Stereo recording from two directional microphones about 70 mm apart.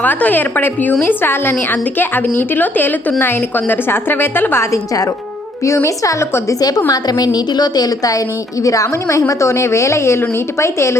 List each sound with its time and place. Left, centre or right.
0.0 s a woman's voice: left
6.5 s a woman's voice: left